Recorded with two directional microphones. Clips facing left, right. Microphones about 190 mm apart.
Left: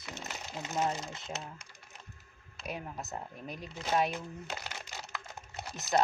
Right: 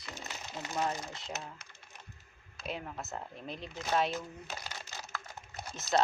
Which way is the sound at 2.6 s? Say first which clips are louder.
Even; 15° left (ahead or behind).